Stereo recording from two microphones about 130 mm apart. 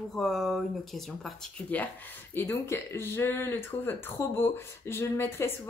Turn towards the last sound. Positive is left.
turn(degrees=20)  # may be behind; listen again after turning